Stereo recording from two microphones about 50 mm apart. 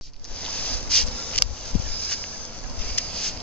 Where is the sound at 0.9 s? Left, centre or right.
Left.